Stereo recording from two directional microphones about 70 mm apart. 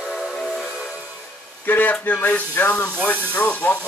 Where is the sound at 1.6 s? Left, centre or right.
Left.